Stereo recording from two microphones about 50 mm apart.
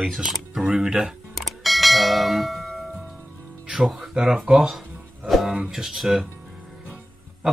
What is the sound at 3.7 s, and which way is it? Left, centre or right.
Speech, centre.